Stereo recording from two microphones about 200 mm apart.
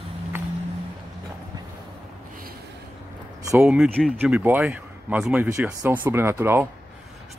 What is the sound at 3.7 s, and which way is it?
Speech, 5° right (ahead or behind).